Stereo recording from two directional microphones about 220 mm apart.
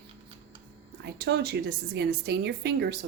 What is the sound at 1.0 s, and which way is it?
A woman's voice, 50° right (ahead or behind).